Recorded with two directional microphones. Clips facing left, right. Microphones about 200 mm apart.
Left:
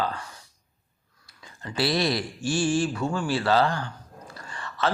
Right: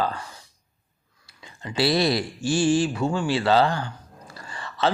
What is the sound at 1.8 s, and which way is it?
A man's voice, 30° right (ahead or behind).